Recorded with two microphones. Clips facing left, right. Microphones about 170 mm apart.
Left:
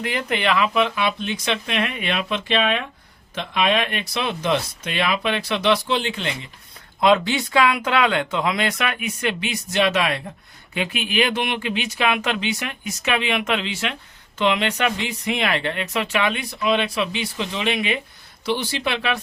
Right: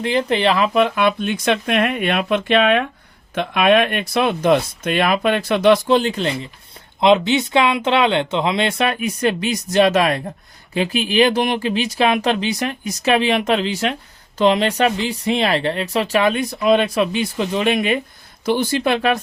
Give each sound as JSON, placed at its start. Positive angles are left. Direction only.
{"t": 0.0, "sound": "speech", "side_deg": -30}
{"t": 7.0, "sound": "speech", "side_deg": -20}